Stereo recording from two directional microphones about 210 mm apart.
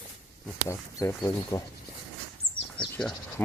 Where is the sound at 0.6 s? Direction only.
15° left (ahead or behind).